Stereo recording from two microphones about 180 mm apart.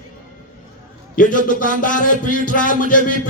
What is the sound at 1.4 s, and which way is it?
A man's voice, 45° left (ahead or behind).